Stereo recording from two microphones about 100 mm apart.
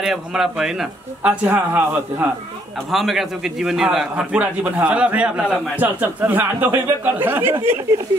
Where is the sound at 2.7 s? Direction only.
Centre (ahead or behind); by 8.0 s 25° right (ahead or behind).